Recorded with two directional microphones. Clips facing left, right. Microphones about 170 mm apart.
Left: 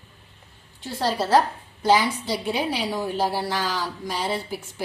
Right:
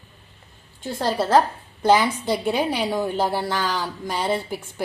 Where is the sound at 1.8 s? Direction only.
55° right (ahead or behind).